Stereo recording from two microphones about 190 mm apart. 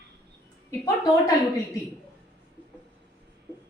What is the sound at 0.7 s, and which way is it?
Speech, 15° left (ahead or behind).